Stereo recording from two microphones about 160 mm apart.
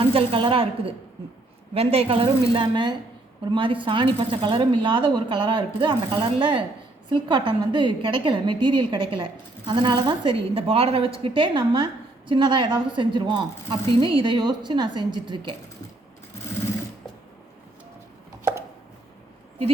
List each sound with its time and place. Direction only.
0.0 s a woman's voice: 35° right (ahead or behind)